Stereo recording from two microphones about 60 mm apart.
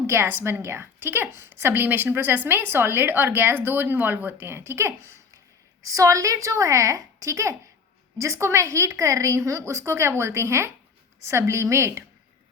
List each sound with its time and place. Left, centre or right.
0.1 s a woman's voice: right
5.8 s a woman's voice: right